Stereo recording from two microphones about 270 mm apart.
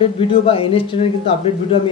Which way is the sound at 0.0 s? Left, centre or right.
Centre.